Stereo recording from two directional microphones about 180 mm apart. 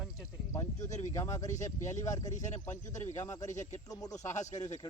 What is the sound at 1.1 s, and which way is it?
Speech, 20° left (ahead or behind).